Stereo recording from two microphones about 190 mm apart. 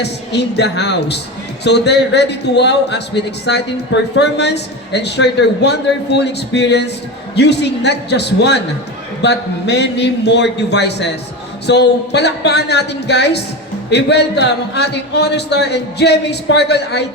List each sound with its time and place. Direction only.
0.0 s a man's voice: 65° left (ahead or behind)